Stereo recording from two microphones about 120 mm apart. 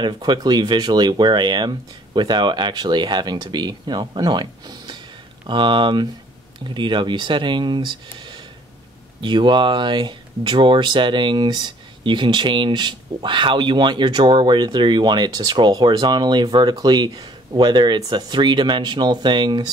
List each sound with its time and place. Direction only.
0.0 s speech: 35° right (ahead or behind)